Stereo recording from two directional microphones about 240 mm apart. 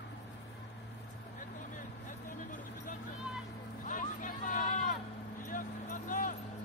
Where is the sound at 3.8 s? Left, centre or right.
Left.